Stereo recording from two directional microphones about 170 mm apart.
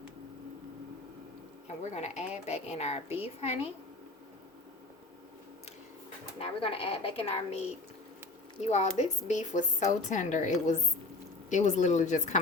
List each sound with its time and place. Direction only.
1.6 s speech: 40° left (ahead or behind)
6.4 s speech: 35° left (ahead or behind)
8.6 s a woman's voice: 40° left (ahead or behind)